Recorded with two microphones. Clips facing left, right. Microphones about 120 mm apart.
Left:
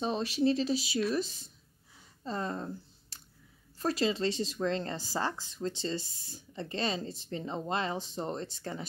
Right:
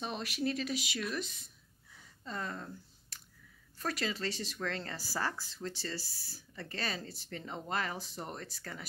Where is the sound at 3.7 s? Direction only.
30° left (ahead or behind).